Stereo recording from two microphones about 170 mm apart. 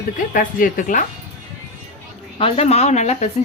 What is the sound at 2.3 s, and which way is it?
Speech, 35° left (ahead or behind).